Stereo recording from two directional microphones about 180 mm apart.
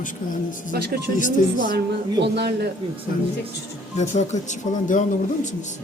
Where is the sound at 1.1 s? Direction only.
45° left (ahead or behind).